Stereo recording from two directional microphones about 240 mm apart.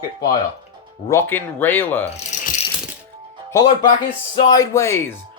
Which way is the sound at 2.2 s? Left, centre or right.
Left.